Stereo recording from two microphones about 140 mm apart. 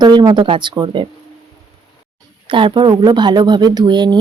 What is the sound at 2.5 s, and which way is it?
Speech, 35° right (ahead or behind).